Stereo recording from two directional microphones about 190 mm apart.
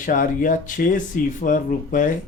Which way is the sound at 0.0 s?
45° left (ahead or behind).